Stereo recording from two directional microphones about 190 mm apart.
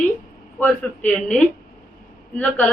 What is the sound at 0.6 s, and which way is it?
A woman's voice, 5° left (ahead or behind).